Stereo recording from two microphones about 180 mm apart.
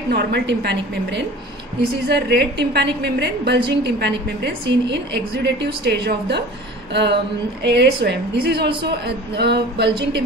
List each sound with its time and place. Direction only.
0.1 s a woman's voice: 65° right (ahead or behind)
6.9 s a sound: 75° right (ahead or behind)
7.6 s a woman's voice: 70° right (ahead or behind)